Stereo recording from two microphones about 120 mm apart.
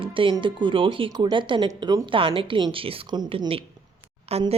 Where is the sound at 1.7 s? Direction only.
30° right (ahead or behind).